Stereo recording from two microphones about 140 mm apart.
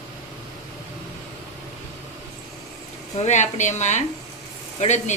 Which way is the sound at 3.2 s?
60° left (ahead or behind).